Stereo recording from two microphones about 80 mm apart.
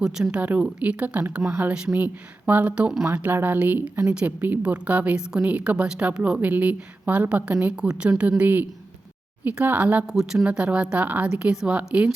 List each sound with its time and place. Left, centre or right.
0.0 s a woman's voice: centre
10.1 s speech: centre
10.4 s a woman's voice: centre
11.3 s a woman's voice: centre